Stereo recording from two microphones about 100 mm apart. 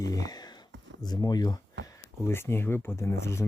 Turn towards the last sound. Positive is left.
turn(degrees=25)  # may be behind; listen again after turning